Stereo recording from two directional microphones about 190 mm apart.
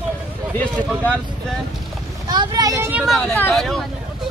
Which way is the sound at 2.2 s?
20° right (ahead or behind).